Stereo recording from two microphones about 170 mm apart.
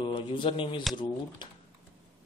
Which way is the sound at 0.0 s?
30° left (ahead or behind).